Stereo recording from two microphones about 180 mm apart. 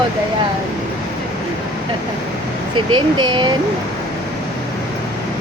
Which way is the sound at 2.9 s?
25° right (ahead or behind).